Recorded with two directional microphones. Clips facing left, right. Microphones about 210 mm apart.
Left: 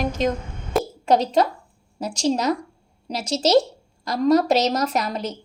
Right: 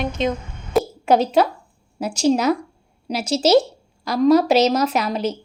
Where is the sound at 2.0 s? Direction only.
5° right (ahead or behind).